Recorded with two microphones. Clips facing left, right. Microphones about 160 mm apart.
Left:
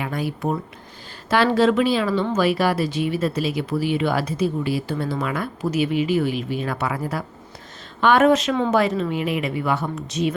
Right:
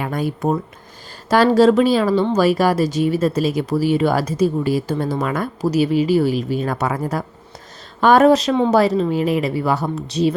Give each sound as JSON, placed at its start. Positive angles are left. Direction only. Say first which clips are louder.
{"t": 0.0, "sound": "speech", "louder": "right 4 dB", "side_deg": -45}
{"t": 1.3, "sound": "speech", "louder": "right 5 dB", "side_deg": -40}